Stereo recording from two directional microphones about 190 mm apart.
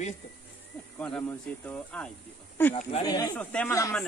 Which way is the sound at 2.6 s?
10° left (ahead or behind).